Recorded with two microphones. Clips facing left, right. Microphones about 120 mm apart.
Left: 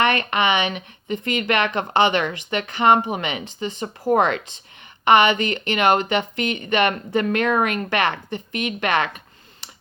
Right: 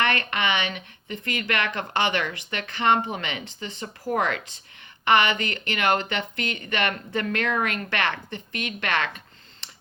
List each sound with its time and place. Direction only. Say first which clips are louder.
0.0 s speech: left 5 dB; 20° left (ahead or behind)